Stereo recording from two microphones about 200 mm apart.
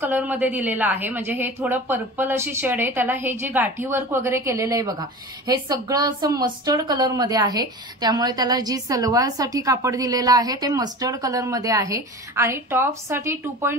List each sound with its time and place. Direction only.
0.0 s speech: 10° right (ahead or behind)